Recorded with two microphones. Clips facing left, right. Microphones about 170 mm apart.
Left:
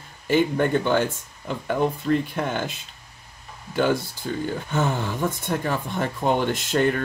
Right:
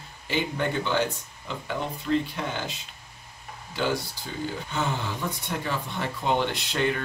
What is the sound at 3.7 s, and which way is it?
Speech, 50° left (ahead or behind).